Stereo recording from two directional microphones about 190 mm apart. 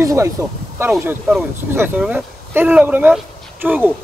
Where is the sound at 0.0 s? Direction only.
15° right (ahead or behind).